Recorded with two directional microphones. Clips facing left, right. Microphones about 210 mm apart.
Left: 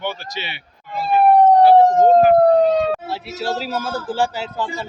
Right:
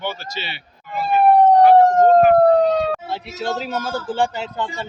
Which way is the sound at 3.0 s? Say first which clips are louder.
Left 1 dB; 5° left (ahead or behind).